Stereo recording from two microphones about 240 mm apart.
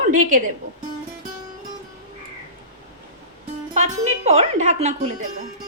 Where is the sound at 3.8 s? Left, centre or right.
Right.